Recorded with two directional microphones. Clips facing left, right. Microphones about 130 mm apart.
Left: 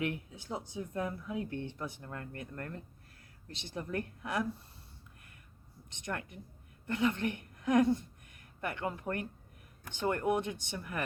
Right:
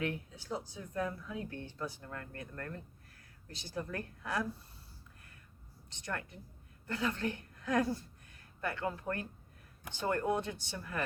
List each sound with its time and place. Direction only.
0.0 s speech: 20° left (ahead or behind)
5.9 s speech: 20° left (ahead or behind)